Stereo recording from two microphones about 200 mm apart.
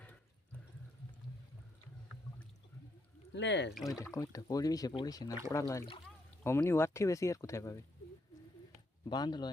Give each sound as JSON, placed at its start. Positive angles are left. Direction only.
{"t": 3.3, "sound": "speech", "side_deg": 60}
{"t": 4.0, "sound": "speech", "side_deg": 15}
{"t": 9.0, "sound": "speech", "side_deg": 20}